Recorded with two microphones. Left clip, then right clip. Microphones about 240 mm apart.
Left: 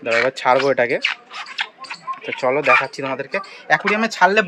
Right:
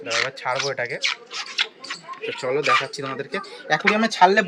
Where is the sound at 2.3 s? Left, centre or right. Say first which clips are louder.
Left 5 dB; centre.